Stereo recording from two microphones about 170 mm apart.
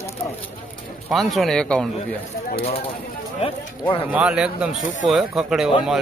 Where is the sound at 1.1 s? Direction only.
Centre (ahead or behind).